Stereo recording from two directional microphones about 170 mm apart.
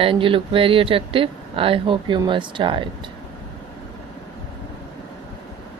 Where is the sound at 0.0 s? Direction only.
30° right (ahead or behind).